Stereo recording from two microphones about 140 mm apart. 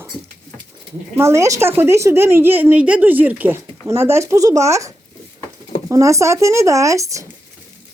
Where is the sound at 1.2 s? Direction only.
20° right (ahead or behind).